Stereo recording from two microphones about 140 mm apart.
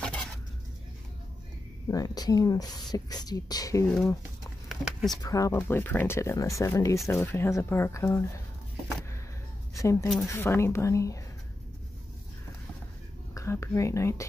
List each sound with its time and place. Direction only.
0.0 s a sound: 5° left (ahead or behind)
1.9 s speech: 25° left (ahead or behind)
4.6 s a sound: centre (ahead or behind)
5.1 s speech: 25° left (ahead or behind)
9.8 s a woman's voice: 20° left (ahead or behind)
13.3 s speech: 20° left (ahead or behind)